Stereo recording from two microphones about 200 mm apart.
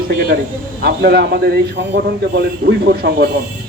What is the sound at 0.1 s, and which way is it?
Speech, 50° right (ahead or behind).